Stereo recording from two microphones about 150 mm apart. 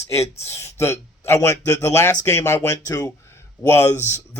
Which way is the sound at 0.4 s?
15° left (ahead or behind).